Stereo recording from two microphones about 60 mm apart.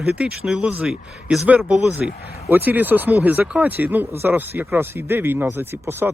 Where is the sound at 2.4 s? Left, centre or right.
Right.